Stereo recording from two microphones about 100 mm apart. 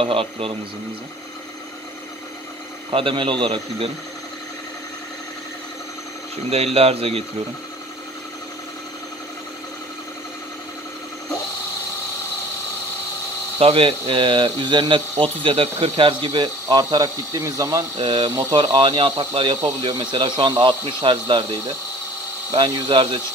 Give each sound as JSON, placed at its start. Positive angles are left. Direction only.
{"t": 0.0, "sound": "speech", "side_deg": -65}
{"t": 2.9, "sound": "speech", "side_deg": -60}
{"t": 6.5, "sound": "speech", "side_deg": -85}
{"t": 13.6, "sound": "speech", "side_deg": -80}
{"t": 16.3, "sound": "speech", "side_deg": -40}
{"t": 18.0, "sound": "speech", "side_deg": -55}
{"t": 18.3, "sound": "speech", "side_deg": -40}
{"t": 18.6, "sound": "speech", "side_deg": -55}
{"t": 19.8, "sound": "speech", "side_deg": -45}
{"t": 22.5, "sound": "speech", "side_deg": -60}